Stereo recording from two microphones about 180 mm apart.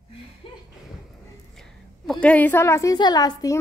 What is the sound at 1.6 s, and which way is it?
A woman's voice, 5° left (ahead or behind).